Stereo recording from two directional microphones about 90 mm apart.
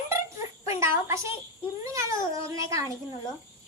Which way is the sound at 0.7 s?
30° right (ahead or behind).